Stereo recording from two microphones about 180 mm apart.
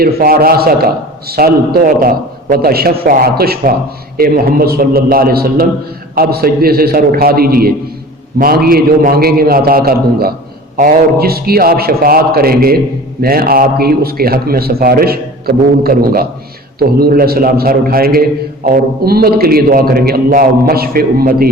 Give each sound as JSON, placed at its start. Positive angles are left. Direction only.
{"t": 0.0, "sound": "a man's voice", "side_deg": -55}